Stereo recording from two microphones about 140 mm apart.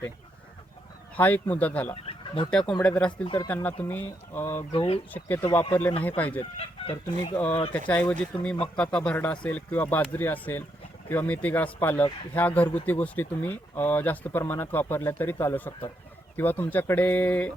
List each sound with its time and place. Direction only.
1.1 s speech: 10° left (ahead or behind)
2.0 s bird: 40° left (ahead or behind)
2.5 s speech: 5° left (ahead or behind)
4.7 s speech: 35° left (ahead or behind)
5.1 s speech: 15° left (ahead or behind)
6.4 s chicken: 40° left (ahead or behind)
7.7 s speech: 10° left (ahead or behind)